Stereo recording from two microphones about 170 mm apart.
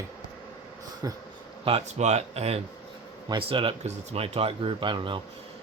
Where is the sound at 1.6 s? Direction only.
35° right (ahead or behind).